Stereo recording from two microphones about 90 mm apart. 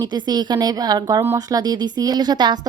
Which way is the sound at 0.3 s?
50° right (ahead or behind).